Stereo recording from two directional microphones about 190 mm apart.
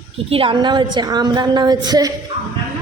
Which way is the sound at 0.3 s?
30° right (ahead or behind).